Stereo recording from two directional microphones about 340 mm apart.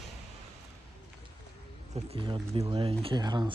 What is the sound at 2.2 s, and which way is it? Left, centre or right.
Speech, centre.